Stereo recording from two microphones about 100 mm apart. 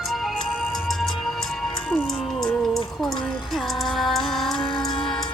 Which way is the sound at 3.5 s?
Centre (ahead or behind).